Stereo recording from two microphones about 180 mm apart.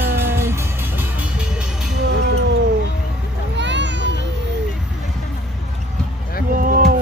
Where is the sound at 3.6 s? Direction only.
80° right.